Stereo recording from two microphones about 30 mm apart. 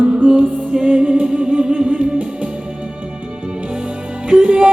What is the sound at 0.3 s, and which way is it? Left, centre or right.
Music, right.